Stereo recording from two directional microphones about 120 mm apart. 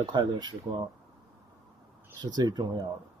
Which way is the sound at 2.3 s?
35° right (ahead or behind).